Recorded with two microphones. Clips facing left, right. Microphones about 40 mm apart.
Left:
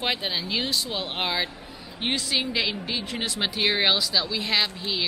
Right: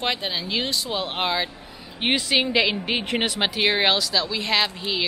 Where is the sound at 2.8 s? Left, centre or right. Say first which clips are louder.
Right 6 dB; right.